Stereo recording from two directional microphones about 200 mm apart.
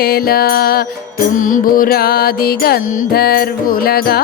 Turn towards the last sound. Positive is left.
turn(degrees=50)  # may be behind; listen again after turning